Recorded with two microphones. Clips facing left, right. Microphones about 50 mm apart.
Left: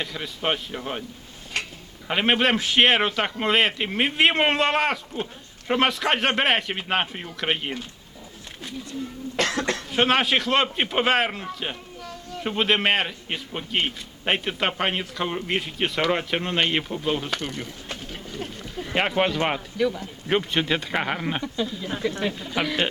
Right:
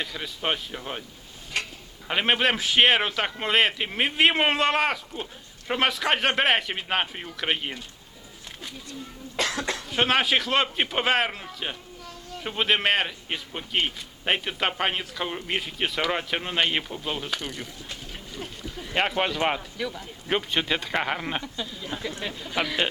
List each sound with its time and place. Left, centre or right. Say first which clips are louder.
0.0 s a man's voice: left 2 dB; centre
2.0 s a man's voice: left 2 dB; centre
9.4 s cough: left 3 dB; left
9.9 s a man's voice: left 2 dB; centre
18.3 s a sound: left 3 dB; left
18.9 s a man's voice: left 2 dB; centre